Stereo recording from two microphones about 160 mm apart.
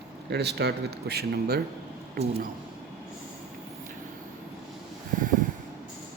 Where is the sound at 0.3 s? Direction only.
90° right.